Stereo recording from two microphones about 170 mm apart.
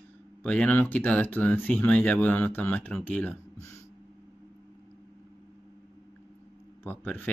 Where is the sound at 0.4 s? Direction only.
5° left (ahead or behind).